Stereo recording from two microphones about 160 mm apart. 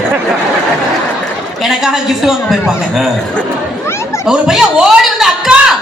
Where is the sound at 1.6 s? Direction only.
Centre (ahead or behind).